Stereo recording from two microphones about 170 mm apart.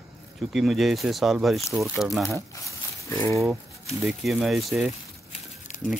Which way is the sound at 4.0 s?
Centre (ahead or behind).